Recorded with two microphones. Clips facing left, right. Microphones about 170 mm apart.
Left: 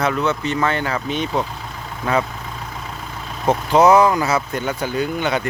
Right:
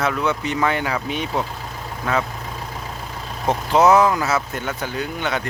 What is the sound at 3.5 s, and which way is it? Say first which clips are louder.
Speech: left 2 dB; centre (ahead or behind).